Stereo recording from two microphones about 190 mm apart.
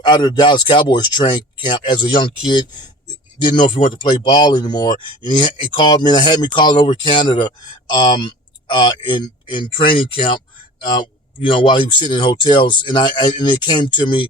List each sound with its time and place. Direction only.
0.0 s speech: 20° left (ahead or behind)